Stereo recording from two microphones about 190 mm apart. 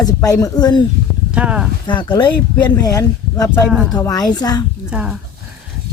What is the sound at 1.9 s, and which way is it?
Speech, 25° left (ahead or behind).